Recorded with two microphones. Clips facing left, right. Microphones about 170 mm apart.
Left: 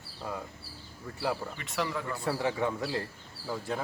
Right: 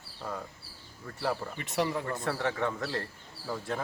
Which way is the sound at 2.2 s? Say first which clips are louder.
Left 3 dB; 10° left (ahead or behind).